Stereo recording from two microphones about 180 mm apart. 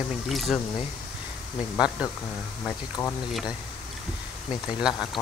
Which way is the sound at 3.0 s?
10° left (ahead or behind).